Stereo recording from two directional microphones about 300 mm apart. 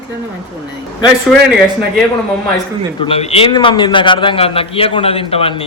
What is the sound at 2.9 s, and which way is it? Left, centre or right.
A man's voice, centre.